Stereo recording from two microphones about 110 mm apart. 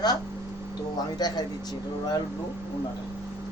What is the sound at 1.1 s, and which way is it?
Speech, 40° left (ahead or behind).